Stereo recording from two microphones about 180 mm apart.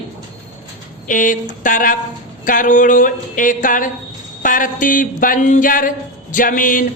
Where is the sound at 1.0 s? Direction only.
45° left (ahead or behind).